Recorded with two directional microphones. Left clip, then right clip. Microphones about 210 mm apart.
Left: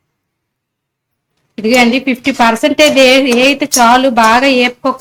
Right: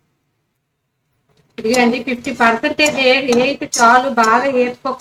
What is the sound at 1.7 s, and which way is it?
Speech, 45° left (ahead or behind).